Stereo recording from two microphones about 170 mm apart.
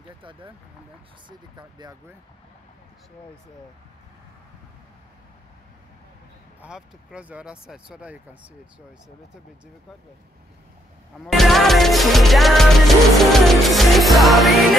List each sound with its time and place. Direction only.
0.2 s speech: 30° right (ahead or behind)
1.6 s speech: 25° right (ahead or behind)
6.6 s speech: 5° right (ahead or behind)
11.2 s music: centre (ahead or behind)